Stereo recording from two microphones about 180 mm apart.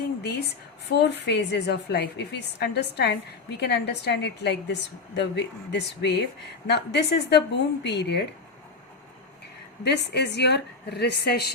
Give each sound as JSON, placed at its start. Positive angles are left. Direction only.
{"t": 0.2, "sound": "a woman's voice", "side_deg": 70}
{"t": 9.8, "sound": "a woman's voice", "side_deg": 70}